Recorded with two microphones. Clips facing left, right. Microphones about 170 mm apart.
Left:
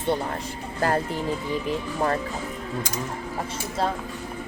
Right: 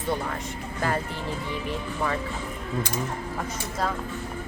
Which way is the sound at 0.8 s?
40° left (ahead or behind).